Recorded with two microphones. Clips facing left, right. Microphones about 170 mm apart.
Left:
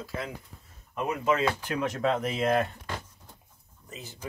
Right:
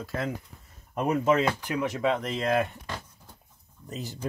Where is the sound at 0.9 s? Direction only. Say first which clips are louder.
Right 5 dB; 35° right (ahead or behind).